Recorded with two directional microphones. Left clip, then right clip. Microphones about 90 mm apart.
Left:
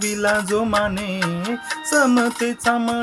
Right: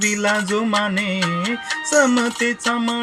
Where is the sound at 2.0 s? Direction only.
40° left (ahead or behind).